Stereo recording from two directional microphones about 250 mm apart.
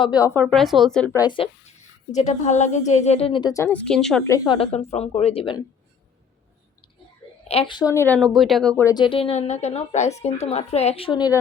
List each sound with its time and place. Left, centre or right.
0.0 s speech: centre
0.4 s speech: centre
2.1 s a woman's voice: left
7.4 s a woman's voice: left